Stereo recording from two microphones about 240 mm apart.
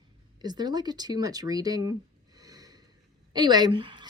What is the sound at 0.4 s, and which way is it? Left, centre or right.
Speech, centre.